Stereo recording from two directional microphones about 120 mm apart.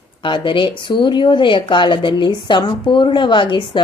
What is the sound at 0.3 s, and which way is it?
Speech, 45° left (ahead or behind).